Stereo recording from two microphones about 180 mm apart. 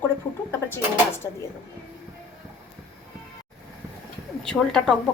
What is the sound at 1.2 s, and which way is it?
Speech, 15° left (ahead or behind).